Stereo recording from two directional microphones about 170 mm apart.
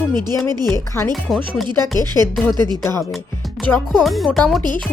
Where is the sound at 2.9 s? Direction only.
15° left (ahead or behind).